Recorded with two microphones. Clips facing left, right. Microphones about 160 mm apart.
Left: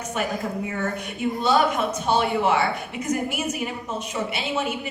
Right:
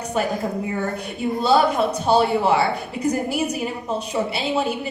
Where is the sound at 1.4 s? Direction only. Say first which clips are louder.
Right 4 dB; 35° right (ahead or behind).